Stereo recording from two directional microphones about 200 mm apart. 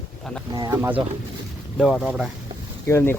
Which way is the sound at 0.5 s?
15° right (ahead or behind).